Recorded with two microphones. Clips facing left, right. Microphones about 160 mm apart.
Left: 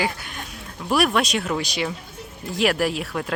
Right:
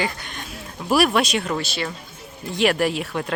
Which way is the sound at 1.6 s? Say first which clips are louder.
Left 1 dB; 15° left (ahead or behind).